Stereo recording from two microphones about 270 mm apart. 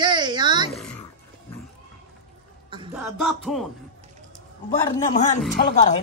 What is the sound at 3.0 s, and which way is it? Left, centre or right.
Music, centre.